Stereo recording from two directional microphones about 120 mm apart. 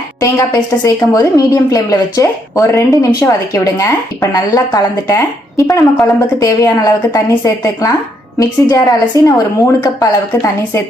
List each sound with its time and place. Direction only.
0.2 s a woman's voice: 25° left (ahead or behind)